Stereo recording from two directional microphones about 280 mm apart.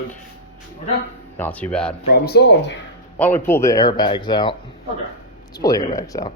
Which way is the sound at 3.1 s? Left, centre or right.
Centre.